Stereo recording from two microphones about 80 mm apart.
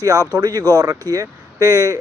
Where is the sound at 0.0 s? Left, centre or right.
Right.